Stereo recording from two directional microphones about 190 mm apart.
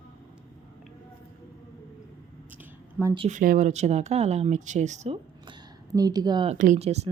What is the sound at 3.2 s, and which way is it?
Speech, 40° right (ahead or behind).